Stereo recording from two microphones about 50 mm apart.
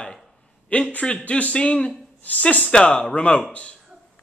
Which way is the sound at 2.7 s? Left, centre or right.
Centre.